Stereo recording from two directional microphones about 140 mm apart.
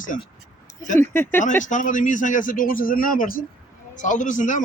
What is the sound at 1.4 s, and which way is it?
A man's voice, 65° left (ahead or behind).